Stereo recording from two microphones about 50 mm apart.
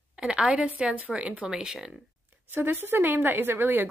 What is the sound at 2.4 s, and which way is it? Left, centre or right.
A woman's voice, right.